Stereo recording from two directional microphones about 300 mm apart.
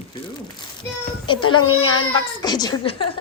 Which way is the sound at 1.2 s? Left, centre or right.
Centre.